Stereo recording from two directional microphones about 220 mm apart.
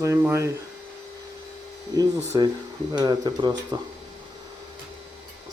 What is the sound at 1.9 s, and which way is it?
Speech, 15° right (ahead or behind).